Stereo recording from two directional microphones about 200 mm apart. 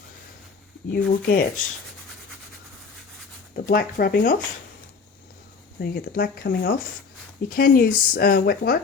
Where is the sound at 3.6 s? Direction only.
50° left (ahead or behind).